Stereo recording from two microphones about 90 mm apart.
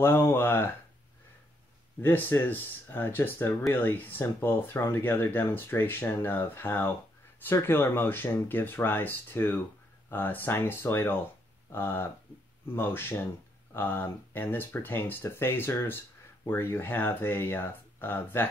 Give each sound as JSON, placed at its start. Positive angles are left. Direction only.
{"t": 0.0, "sound": "speech", "side_deg": 25}
{"t": 2.0, "sound": "speech", "side_deg": 25}